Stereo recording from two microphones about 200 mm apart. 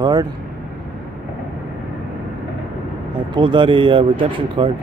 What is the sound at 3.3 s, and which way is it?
Speech, 25° right (ahead or behind).